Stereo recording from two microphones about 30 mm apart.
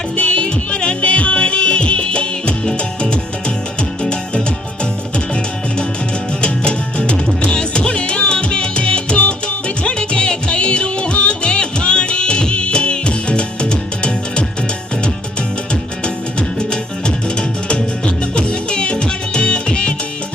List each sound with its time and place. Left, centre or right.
0.2 s music: left
6.4 s music: left
15.7 s music: left